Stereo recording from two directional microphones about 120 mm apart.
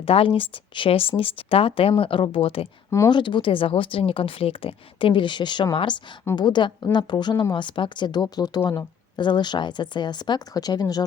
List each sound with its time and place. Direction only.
0.0 s a woman's voice: 50° left (ahead or behind); by 8.9 s 25° left (ahead or behind)
9.1 s a woman's voice: 40° left (ahead or behind)